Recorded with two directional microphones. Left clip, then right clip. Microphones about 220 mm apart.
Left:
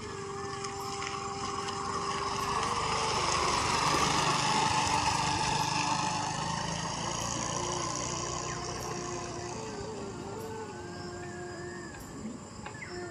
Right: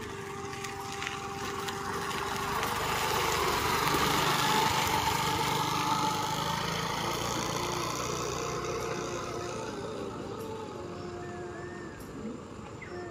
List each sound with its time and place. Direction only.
1.0 s vehicle: 5° right (ahead or behind)
7.2 s lawn mower: 20° right (ahead or behind)
7.8 s vehicle: 20° right (ahead or behind)
8.3 s vehicle: 5° right (ahead or behind)